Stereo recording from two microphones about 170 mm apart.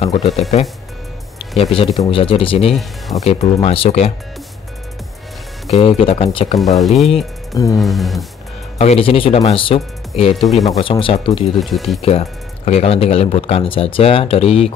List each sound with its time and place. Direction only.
0.0 s speech: 35° left (ahead or behind)
1.6 s speech: 35° left (ahead or behind)
2.7 s speech: centre (ahead or behind)
3.3 s speech: 35° left (ahead or behind)
5.8 s speech: 35° left (ahead or behind)
6.6 s speech: centre (ahead or behind)
7.5 s music: 20° left (ahead or behind)
7.8 s speech: centre (ahead or behind)
8.7 s speech: 35° left (ahead or behind)
10.3 s speech: centre (ahead or behind)
10.8 s speech: 30° left (ahead or behind)
11.5 s speech: centre (ahead or behind)
12.0 s speech: 35° left (ahead or behind)